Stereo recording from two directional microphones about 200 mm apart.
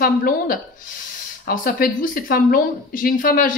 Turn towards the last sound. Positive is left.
turn(degrees=45)  # may be behind; listen again after turning